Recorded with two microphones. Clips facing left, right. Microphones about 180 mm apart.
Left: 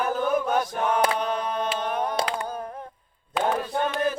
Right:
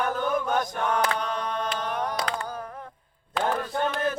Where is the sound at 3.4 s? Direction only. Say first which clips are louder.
Left 2 dB; 5° left (ahead or behind).